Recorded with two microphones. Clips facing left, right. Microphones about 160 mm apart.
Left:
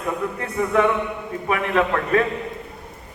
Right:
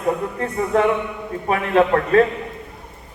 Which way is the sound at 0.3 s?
35° right (ahead or behind).